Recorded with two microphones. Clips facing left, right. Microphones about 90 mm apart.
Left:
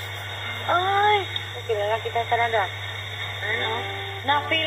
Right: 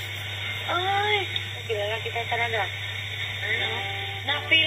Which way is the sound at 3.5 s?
30° left (ahead or behind).